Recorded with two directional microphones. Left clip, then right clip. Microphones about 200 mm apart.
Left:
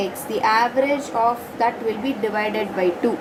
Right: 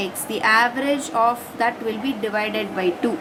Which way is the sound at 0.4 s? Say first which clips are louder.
Even; 20° right (ahead or behind).